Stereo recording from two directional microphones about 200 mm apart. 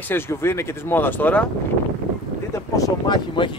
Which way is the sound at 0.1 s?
10° left (ahead or behind).